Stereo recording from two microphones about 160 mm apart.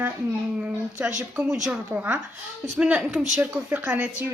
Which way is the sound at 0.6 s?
5° right (ahead or behind).